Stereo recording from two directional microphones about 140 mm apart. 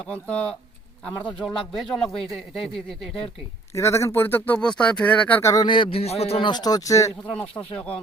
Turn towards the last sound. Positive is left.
turn(degrees=10)  # may be behind; listen again after turning